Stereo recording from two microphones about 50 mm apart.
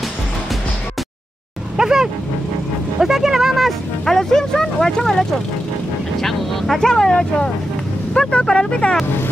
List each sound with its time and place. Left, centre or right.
1.8 s dog: centre
3.0 s a sound: centre
4.0 s speech: centre
6.2 s speech: centre